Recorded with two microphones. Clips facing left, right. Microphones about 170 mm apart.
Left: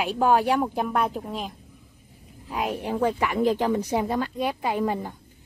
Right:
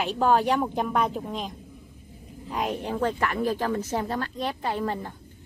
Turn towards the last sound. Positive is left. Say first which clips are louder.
# left 3 dB
turn(degrees=10)  # may be behind; listen again after turning